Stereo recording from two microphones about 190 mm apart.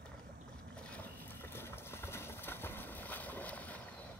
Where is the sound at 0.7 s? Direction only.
5° left (ahead or behind).